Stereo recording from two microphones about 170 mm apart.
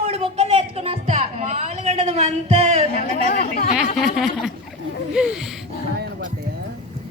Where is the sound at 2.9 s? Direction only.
55° left (ahead or behind).